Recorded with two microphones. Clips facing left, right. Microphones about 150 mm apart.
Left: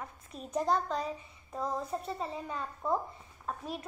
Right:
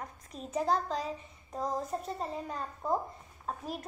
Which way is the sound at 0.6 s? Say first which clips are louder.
Even; 35° right (ahead or behind).